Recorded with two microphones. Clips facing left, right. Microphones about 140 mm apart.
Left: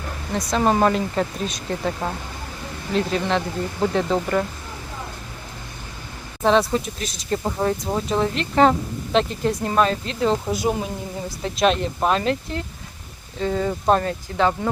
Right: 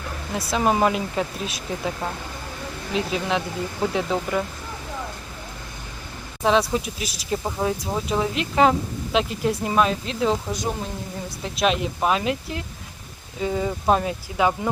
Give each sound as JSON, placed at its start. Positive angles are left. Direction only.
{"t": 0.3, "sound": "speech", "side_deg": -5}
{"t": 2.9, "sound": "speech", "side_deg": -5}
{"t": 6.4, "sound": "speech", "side_deg": 0}